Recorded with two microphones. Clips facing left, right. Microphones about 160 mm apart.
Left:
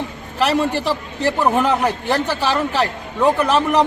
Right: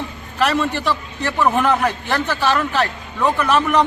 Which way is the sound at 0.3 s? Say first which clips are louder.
Left 1 dB; 35° left (ahead or behind).